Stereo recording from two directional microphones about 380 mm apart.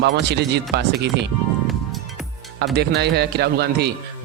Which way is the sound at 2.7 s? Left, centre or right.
Right.